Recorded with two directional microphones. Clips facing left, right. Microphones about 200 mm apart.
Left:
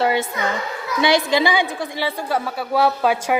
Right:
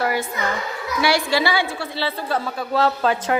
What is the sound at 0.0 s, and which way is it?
A child's voice, 25° left (ahead or behind).